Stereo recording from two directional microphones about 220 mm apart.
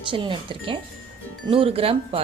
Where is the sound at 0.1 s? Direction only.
25° right (ahead or behind).